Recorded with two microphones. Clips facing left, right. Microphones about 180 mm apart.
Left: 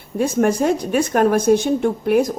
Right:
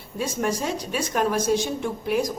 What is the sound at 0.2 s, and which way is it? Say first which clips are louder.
Speech: left 9 dB; 55° left (ahead or behind).